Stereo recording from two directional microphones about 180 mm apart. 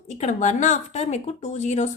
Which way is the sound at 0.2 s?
40° left (ahead or behind).